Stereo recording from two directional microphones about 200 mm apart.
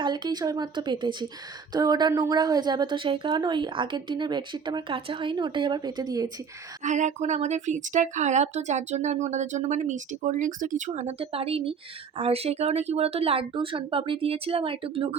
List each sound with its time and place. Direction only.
0.0 s speech: 20° right (ahead or behind)
6.8 s a woman's voice: 35° right (ahead or behind)